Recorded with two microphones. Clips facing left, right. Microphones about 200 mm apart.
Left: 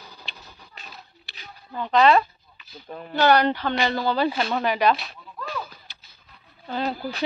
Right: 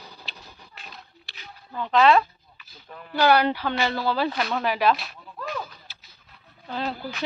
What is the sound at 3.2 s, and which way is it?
A woman's voice, 5° right (ahead or behind).